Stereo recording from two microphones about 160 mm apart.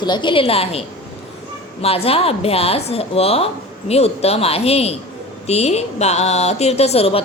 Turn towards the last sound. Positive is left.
turn(degrees=40)  # may be behind; listen again after turning